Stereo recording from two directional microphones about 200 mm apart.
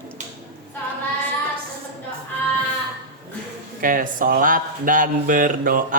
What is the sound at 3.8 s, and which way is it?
Speech, 45° right (ahead or behind).